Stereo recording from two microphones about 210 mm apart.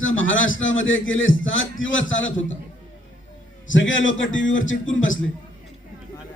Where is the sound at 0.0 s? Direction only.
70° left (ahead or behind).